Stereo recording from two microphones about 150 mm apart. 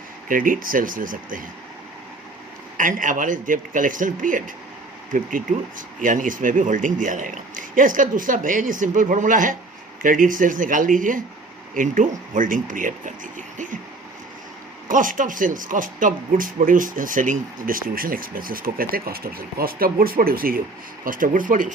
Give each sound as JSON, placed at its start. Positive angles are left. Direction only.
{"t": 0.3, "sound": "speech", "side_deg": -65}
{"t": 2.7, "sound": "speech", "side_deg": -60}
{"t": 14.8, "sound": "speech", "side_deg": -60}